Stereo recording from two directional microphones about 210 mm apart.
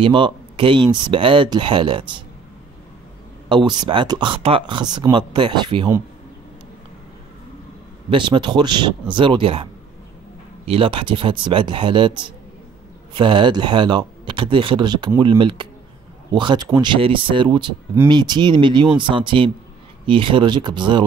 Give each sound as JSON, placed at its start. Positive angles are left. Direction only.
{"t": 0.0, "sound": "speech", "side_deg": -25}
{"t": 3.4, "sound": "speech", "side_deg": -20}
{"t": 8.1, "sound": "speech", "side_deg": -20}